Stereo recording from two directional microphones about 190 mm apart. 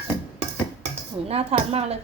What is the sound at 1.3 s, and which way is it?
Speech, 30° right (ahead or behind).